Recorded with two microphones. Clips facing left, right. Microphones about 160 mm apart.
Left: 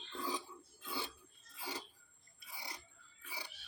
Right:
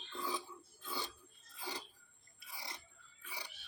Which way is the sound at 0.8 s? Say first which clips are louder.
Even; 10° left (ahead or behind).